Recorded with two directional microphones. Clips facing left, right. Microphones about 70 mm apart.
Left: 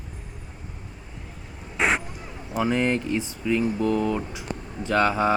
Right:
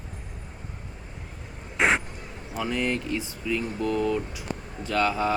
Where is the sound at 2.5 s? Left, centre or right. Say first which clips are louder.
Left 5 dB; centre.